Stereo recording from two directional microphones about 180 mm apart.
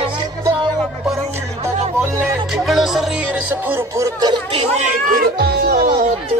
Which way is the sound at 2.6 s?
Centre (ahead or behind).